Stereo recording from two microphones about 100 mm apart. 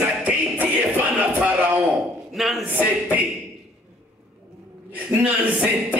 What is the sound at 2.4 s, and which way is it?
Speech, centre (ahead or behind).